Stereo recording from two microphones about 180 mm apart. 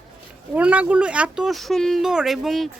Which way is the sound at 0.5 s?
10° right (ahead or behind).